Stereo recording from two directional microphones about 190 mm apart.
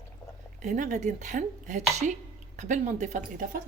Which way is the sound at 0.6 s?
40° right (ahead or behind).